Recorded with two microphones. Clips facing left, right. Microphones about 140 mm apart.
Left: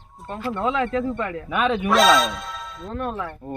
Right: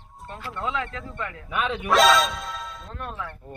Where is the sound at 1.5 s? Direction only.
80° left.